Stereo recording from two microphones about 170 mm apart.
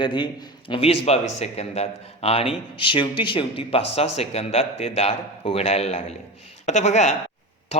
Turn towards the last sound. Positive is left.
turn(degrees=45)  # may be behind; listen again after turning